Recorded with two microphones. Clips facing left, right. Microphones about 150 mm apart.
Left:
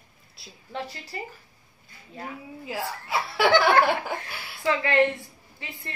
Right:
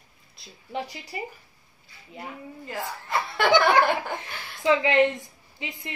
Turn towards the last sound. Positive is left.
turn(degrees=-15)  # may be behind; listen again after turning